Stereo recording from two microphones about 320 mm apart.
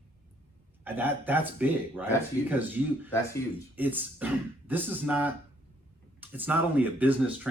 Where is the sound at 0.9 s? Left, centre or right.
Centre.